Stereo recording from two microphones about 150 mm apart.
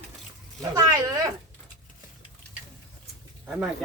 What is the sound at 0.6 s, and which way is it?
Speech, 25° right (ahead or behind).